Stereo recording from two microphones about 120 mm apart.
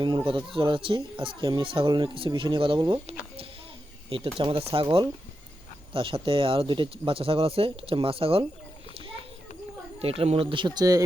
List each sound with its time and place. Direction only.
0.3 s speech: 45° right (ahead or behind)
3.1 s speech: 65° right (ahead or behind)
4.4 s speech: 45° right (ahead or behind)
10.0 s speech: 55° right (ahead or behind); by 11.0 s 30° right (ahead or behind)